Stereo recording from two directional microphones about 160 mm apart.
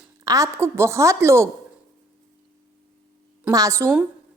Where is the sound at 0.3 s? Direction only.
20° right (ahead or behind).